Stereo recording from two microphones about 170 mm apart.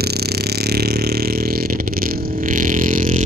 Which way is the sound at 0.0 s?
70° right (ahead or behind).